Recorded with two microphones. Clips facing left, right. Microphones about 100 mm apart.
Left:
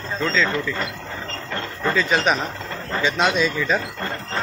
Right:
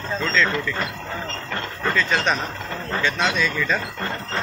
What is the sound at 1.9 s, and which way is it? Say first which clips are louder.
Speech: left 2 dB; 5° left (ahead or behind).